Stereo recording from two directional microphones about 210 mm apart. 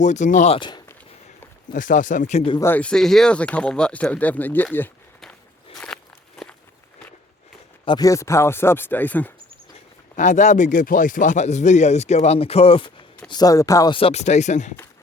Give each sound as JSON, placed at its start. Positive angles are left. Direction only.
{"t": 0.0, "sound": "speech", "side_deg": 35}
{"t": 1.7, "sound": "speech", "side_deg": 40}
{"t": 2.6, "sound": "a sound", "side_deg": 10}
{"t": 7.9, "sound": "speech", "side_deg": 15}
{"t": 10.2, "sound": "speech", "side_deg": 35}